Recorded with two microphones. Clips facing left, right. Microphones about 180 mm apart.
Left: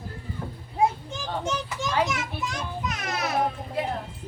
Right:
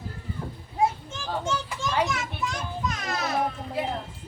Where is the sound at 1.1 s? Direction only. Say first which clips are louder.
Even; 15° left (ahead or behind).